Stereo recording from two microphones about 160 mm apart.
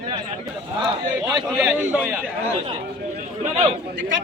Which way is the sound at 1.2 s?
5° right (ahead or behind).